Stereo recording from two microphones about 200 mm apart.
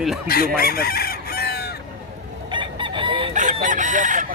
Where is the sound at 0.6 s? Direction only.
50° left (ahead or behind).